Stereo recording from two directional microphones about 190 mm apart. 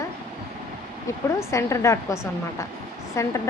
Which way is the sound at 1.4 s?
15° left (ahead or behind).